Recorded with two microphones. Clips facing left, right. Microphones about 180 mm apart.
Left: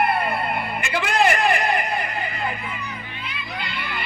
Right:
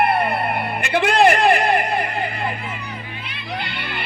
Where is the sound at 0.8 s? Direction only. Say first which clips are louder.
Right 6 dB; 65° right (ahead or behind).